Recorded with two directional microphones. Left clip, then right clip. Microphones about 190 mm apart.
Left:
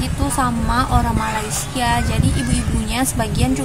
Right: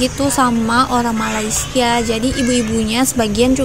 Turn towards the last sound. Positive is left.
turn(degrees=-25)  # may be behind; listen again after turning